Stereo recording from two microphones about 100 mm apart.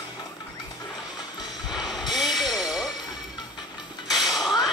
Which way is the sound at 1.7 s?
Centre (ahead or behind).